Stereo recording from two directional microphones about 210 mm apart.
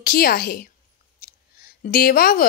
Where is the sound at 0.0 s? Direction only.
45° left (ahead or behind).